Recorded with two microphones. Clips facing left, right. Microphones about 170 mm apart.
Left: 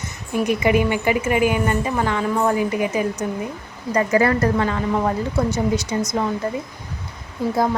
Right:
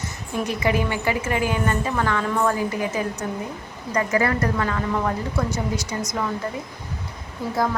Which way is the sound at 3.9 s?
30° left (ahead or behind).